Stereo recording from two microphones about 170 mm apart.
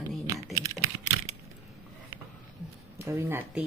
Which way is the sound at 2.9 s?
15° right (ahead or behind).